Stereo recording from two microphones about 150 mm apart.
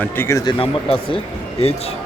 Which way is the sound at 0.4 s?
35° left (ahead or behind).